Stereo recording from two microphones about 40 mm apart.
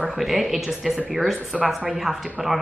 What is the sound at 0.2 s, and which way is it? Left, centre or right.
Speech, centre.